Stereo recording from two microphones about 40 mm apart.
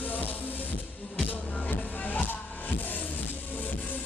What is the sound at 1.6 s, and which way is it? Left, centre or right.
Music, left.